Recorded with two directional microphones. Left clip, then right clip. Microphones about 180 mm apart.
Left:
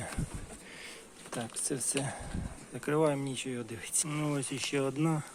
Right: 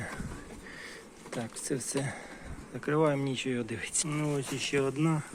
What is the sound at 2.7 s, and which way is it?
Speech, 20° left (ahead or behind).